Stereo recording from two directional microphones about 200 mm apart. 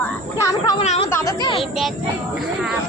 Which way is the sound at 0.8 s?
30° left (ahead or behind).